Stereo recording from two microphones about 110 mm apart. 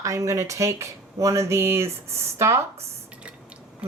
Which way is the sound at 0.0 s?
30° right (ahead or behind).